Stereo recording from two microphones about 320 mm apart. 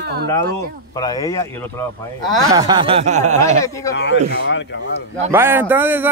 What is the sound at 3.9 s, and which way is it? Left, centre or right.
Speech, left.